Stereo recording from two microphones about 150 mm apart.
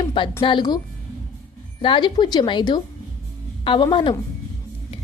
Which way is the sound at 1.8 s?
35° left (ahead or behind).